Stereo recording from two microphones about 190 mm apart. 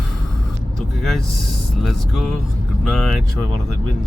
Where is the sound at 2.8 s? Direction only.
Centre (ahead or behind).